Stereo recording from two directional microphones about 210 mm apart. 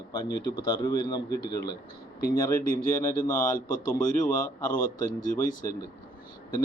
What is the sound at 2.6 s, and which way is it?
Speech, 40° left (ahead or behind).